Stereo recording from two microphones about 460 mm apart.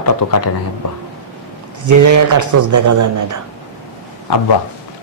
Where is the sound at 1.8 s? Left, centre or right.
Right.